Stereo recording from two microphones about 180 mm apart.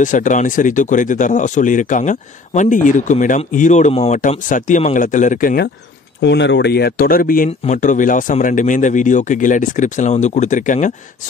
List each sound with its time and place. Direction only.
0.0 s speech: 45° left (ahead or behind)
6.2 s speech: 80° left; by 10.9 s 45° left (ahead or behind)